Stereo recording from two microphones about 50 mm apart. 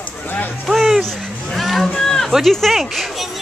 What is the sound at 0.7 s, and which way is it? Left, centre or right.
Speech, centre.